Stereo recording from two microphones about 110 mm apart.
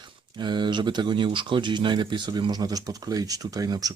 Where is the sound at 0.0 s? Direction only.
45° right (ahead or behind).